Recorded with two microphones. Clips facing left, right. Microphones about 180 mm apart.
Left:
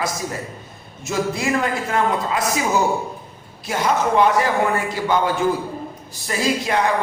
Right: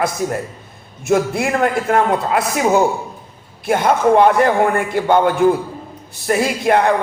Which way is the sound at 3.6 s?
55° right (ahead or behind).